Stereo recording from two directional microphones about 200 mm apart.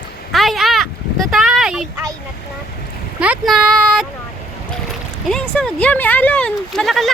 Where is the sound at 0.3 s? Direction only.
Centre (ahead or behind).